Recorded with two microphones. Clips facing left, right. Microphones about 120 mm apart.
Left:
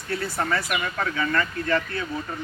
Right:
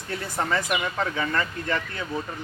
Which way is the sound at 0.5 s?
20° right (ahead or behind).